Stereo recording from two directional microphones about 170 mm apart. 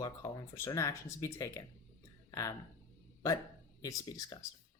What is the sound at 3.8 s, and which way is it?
Speech, 20° left (ahead or behind).